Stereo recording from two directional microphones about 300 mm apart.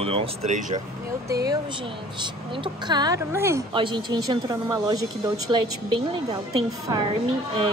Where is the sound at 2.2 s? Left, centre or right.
Centre.